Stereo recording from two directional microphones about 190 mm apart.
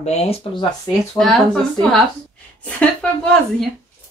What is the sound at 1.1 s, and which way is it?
Speech, centre (ahead or behind).